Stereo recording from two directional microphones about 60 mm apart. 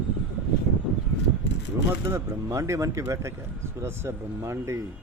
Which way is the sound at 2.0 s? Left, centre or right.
Right.